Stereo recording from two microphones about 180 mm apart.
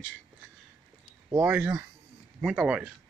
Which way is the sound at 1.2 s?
15° right (ahead or behind).